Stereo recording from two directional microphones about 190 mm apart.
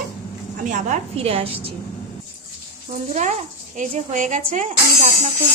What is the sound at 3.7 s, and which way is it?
Speech, 40° right (ahead or behind).